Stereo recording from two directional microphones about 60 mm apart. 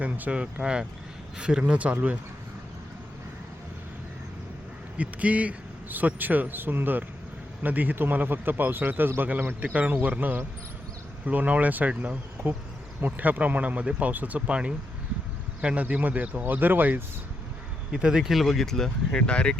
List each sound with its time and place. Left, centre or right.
0.0 s speech: right
0.6 s speech: centre
4.9 s a man's voice: right
17.9 s speech: centre
18.3 s speech: centre
19.3 s speech: centre